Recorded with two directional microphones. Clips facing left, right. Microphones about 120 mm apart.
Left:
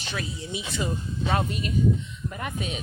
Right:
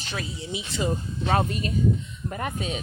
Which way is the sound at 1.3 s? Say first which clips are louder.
Right 3 dB; 40° right (ahead or behind).